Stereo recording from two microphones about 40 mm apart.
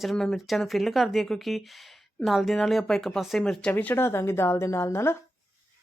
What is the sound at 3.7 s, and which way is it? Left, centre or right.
Speech, left.